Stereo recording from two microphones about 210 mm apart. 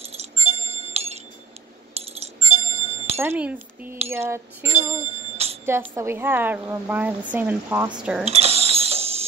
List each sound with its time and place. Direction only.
0.0 s music: 30° right (ahead or behind)
2.0 s bell: 30° right (ahead or behind)
3.2 s a woman's voice: 10° right (ahead or behind)
4.9 s bicycle bell: 30° right (ahead or behind)
5.7 s a woman's voice: 10° right (ahead or behind)
8.3 s mechanisms: 30° right (ahead or behind)